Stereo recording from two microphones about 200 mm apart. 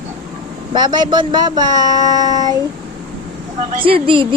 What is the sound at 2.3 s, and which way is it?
Child singing, 20° left (ahead or behind).